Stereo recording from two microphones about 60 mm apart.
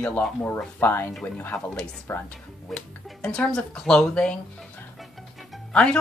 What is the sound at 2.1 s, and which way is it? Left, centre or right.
Speech, left.